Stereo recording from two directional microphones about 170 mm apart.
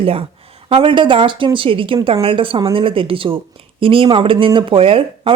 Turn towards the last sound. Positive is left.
turn(degrees=-35)  # may be behind; listen again after turning